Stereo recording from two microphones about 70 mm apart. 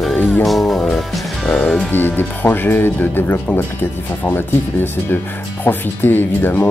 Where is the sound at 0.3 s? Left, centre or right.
Centre.